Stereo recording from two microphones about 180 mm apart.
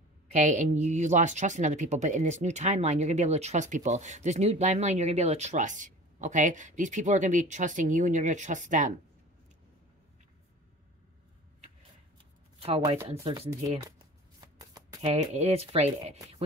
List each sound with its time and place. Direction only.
0.3 s speech: 40° right (ahead or behind)
12.5 s speech: 35° right (ahead or behind)
13.8 s shuffling cards: 20° right (ahead or behind)
15.0 s speech: 35° right (ahead or behind)